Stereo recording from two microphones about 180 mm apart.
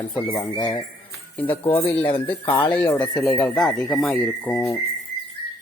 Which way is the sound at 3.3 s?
5° left (ahead or behind).